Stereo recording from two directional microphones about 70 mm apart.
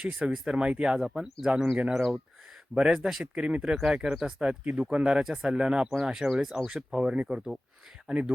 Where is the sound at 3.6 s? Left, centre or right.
Centre.